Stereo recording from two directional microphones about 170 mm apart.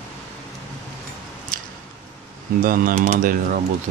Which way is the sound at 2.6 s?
55° right (ahead or behind).